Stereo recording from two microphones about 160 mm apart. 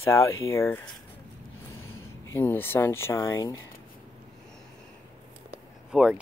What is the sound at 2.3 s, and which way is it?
Speech, 15° left (ahead or behind).